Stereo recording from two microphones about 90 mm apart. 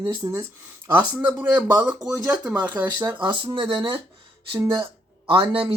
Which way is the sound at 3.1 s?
65° right (ahead or behind).